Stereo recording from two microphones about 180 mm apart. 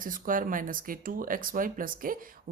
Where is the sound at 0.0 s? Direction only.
50° right (ahead or behind).